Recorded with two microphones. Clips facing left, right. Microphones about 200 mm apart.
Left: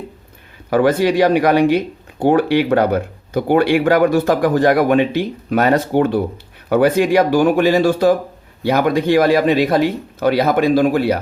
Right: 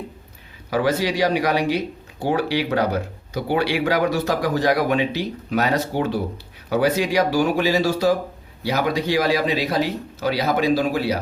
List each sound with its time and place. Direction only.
0.7 s speech: 55° left (ahead or behind)